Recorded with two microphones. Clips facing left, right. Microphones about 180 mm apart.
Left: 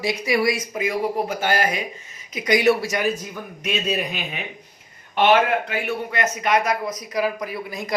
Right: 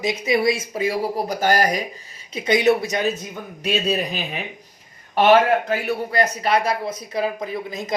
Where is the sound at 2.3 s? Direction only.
25° right (ahead or behind).